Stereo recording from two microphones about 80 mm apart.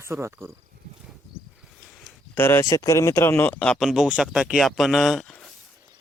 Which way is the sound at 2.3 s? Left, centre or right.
Left.